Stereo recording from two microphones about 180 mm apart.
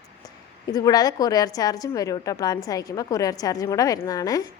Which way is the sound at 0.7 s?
20° left (ahead or behind).